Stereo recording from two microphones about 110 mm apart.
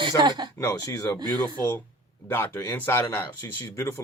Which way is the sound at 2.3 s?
20° left (ahead or behind).